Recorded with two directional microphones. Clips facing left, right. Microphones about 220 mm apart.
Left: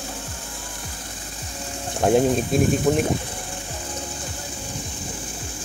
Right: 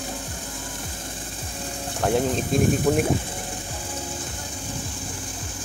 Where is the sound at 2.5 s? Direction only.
5° left (ahead or behind).